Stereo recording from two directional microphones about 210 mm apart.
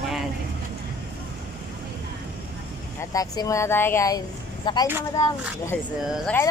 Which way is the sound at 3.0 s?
15° left (ahead or behind).